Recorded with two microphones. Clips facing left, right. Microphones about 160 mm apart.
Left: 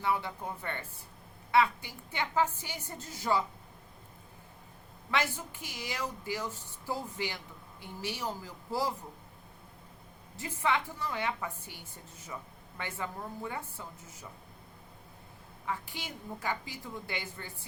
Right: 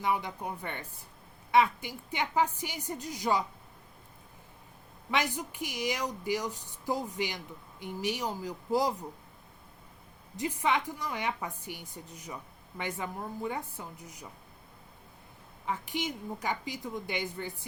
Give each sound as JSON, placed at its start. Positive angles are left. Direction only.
{"t": 0.0, "sound": "a woman's voice", "side_deg": -15}
{"t": 5.1, "sound": "a woman's voice", "side_deg": -15}
{"t": 10.3, "sound": "a woman's voice", "side_deg": -15}
{"t": 15.6, "sound": "a woman's voice", "side_deg": -20}